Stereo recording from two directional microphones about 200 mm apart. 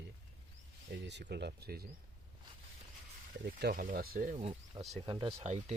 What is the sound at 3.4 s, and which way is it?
Speech, 55° right (ahead or behind).